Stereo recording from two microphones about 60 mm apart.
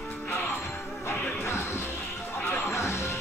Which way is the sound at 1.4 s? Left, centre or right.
Left.